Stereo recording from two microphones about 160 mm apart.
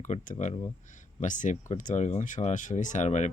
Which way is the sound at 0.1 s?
45° left (ahead or behind).